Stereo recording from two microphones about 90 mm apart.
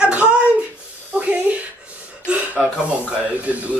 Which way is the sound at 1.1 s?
15° right (ahead or behind).